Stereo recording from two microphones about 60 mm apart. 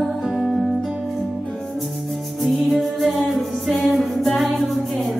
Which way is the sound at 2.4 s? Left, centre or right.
Centre.